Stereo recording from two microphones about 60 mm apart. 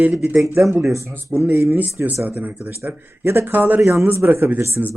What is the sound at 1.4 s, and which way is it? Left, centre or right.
Speech, right.